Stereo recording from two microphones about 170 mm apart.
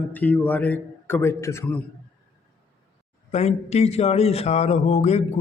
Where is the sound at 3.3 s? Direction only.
40° left (ahead or behind).